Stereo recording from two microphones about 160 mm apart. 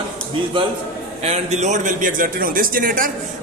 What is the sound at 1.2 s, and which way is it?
A man's voice, 45° right (ahead or behind).